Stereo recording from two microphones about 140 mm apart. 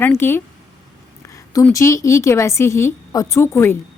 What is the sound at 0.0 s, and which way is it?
Speech, 15° left (ahead or behind).